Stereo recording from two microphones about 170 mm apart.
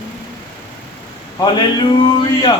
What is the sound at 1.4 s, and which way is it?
Speech, 25° left (ahead or behind).